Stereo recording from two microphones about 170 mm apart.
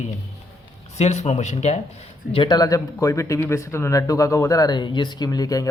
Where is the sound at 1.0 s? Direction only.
40° left (ahead or behind).